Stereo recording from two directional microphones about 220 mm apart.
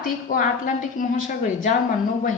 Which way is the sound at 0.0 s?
40° left (ahead or behind).